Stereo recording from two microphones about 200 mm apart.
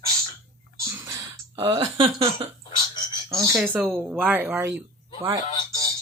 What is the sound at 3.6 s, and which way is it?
Speech, 10° right (ahead or behind).